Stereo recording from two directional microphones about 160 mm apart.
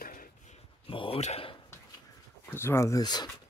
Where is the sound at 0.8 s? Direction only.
35° left (ahead or behind).